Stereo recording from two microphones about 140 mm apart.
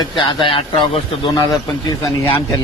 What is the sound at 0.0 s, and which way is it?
A man's voice, 35° left (ahead or behind).